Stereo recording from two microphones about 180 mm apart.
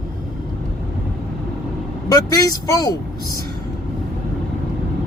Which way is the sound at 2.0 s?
20° left (ahead or behind).